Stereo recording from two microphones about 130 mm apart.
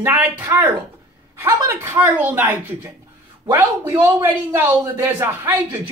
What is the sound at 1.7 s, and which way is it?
A woman's voice, 15° right (ahead or behind).